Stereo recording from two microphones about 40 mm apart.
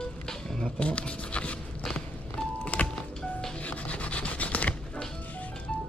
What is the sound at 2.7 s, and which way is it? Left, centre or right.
Music, left.